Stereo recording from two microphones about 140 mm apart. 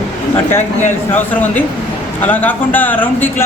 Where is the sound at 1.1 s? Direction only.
15° left (ahead or behind).